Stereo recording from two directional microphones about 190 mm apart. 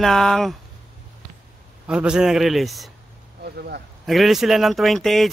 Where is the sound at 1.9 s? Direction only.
5° right (ahead or behind).